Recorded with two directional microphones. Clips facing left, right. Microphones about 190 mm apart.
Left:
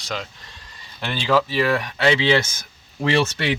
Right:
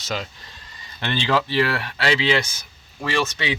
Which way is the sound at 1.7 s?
20° left (ahead or behind).